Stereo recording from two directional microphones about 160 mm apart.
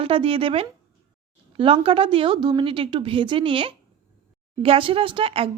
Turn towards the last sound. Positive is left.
turn(degrees=-35)  # may be behind; listen again after turning